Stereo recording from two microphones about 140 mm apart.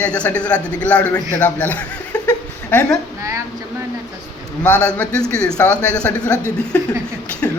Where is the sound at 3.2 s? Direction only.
20° right (ahead or behind).